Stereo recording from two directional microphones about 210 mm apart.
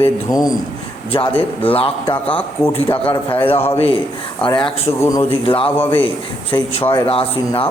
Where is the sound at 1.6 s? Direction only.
25° left (ahead or behind).